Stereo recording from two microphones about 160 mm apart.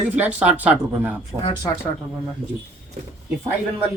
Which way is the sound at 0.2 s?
10° right (ahead or behind).